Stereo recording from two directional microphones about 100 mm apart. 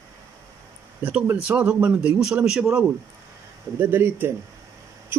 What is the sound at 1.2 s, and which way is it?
Speech, 20° right (ahead or behind).